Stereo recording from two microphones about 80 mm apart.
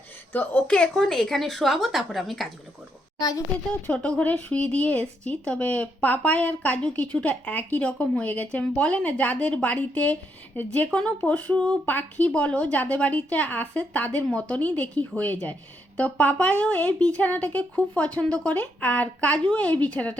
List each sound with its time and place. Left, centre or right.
0.3 s speech: left
0.8 s a woman's voice: centre
3.2 s a child's voice: left
3.7 s speech: centre